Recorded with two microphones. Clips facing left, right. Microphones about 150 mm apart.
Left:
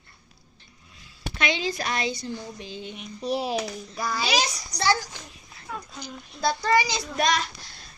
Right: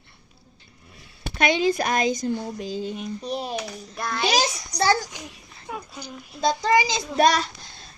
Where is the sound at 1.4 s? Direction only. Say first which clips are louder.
Right 7 dB; 45° right (ahead or behind).